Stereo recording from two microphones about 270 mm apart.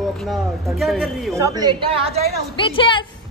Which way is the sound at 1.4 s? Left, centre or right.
Centre.